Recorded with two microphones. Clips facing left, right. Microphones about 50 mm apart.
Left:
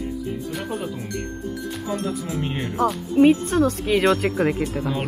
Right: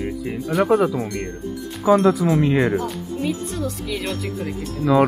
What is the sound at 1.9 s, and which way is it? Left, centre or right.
Speech, right.